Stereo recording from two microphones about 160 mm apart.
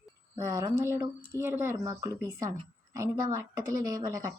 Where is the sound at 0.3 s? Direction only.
20° right (ahead or behind).